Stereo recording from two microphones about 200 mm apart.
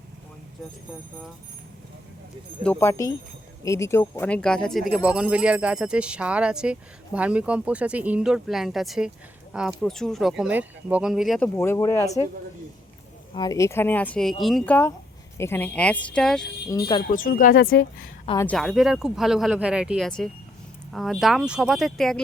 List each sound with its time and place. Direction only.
2.6 s speech: 15° left (ahead or behind)
11.4 s speech: 10° left (ahead or behind)
13.3 s speech: 20° left (ahead or behind); by 14.8 s centre (ahead or behind)
15.4 s speech: 10° left (ahead or behind)
16.6 s speech: 20° left (ahead or behind)
17.1 s speech: 45° left (ahead or behind)
18.3 s speech: 5° left (ahead or behind)